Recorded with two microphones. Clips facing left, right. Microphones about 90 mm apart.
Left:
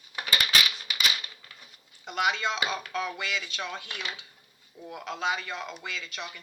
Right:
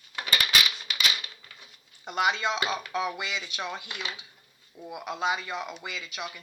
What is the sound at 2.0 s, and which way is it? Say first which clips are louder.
Speech: right 1 dB; 20° right (ahead or behind).